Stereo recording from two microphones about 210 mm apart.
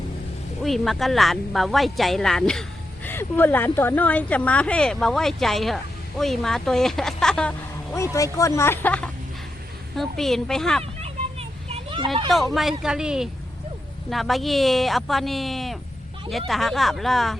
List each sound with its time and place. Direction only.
0.6 s speech: centre (ahead or behind)
7.9 s speech: 15° left (ahead or behind)
11.0 s a sound: 30° right (ahead or behind)
12.5 s speech: centre (ahead or behind)